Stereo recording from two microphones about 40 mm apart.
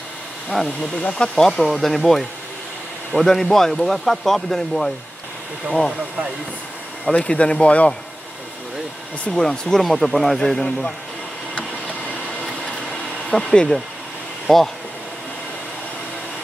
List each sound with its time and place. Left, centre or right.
1.1 s speech: left
1.4 s speech: centre
7.1 s speech: left
9.3 s speech: centre
9.8 s speech: centre
10.4 s speech: centre
13.5 s speech: centre